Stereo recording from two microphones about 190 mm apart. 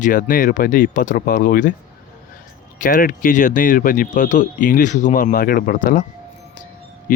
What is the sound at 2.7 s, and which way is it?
Speech, 45° left (ahead or behind).